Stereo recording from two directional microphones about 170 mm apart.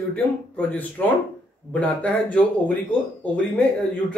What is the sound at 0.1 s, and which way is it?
Speech, 10° left (ahead or behind).